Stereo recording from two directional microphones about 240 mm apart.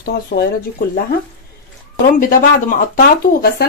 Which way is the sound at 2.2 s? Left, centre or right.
Left.